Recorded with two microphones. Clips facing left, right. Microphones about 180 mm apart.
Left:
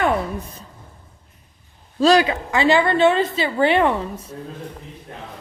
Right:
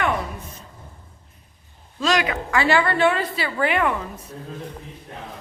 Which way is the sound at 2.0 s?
35° left (ahead or behind).